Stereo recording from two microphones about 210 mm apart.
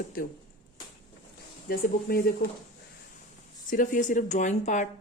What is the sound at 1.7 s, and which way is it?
Speech, 45° left (ahead or behind).